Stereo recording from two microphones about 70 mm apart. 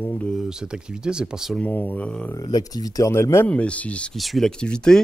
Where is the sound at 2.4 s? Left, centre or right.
Left.